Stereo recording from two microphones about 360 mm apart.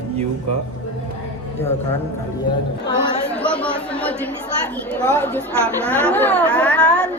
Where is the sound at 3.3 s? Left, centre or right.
Centre.